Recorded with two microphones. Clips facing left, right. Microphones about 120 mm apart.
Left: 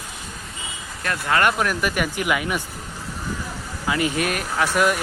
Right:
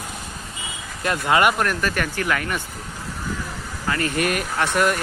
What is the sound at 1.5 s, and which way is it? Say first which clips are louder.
Speech: even; 5° left (ahead or behind).